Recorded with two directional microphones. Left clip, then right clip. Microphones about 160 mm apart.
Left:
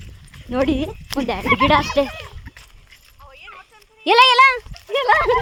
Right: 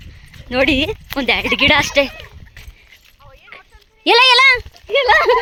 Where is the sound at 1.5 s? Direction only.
40° right (ahead or behind).